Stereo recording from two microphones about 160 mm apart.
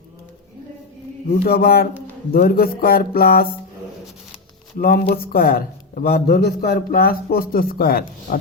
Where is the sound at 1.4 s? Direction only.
70° left (ahead or behind).